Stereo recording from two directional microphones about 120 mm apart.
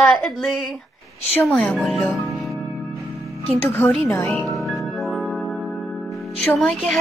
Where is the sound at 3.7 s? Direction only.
10° left (ahead or behind).